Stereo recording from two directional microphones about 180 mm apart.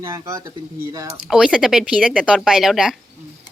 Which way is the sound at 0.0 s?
20° right (ahead or behind).